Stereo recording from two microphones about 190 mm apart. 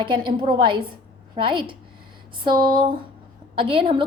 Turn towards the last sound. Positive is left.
turn(degrees=-30)  # may be behind; listen again after turning